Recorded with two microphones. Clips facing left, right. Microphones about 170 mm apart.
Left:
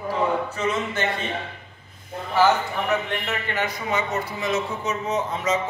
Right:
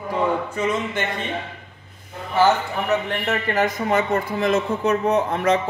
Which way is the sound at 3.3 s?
45° right (ahead or behind).